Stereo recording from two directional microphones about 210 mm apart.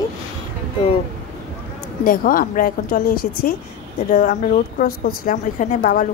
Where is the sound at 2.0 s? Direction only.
40° left (ahead or behind).